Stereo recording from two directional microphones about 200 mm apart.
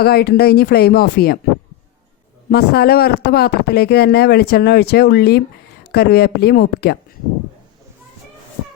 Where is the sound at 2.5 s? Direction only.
50° left (ahead or behind).